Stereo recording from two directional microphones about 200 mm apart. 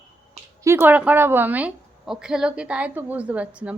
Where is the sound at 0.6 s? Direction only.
10° right (ahead or behind).